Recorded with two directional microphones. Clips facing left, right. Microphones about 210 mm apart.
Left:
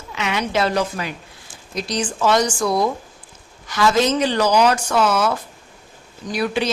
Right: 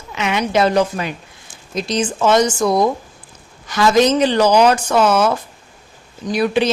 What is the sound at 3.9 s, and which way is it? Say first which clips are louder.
A woman's voice: right 6 dB; 20° right (ahead or behind).